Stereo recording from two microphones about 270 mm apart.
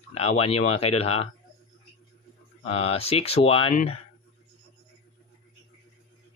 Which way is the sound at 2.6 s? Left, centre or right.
Left.